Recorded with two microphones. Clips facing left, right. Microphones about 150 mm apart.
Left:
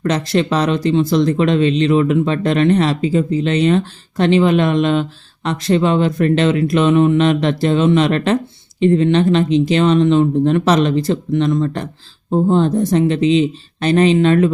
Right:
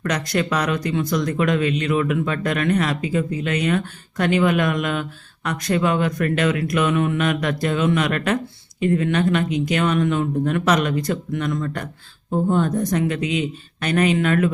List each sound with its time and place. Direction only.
0.0 s speech: 30° left (ahead or behind)